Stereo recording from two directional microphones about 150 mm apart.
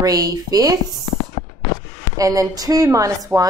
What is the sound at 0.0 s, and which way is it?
Speech, 25° right (ahead or behind).